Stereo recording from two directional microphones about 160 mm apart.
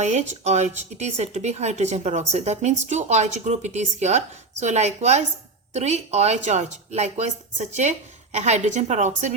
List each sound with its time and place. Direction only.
0.0 s speech: 45° right (ahead or behind)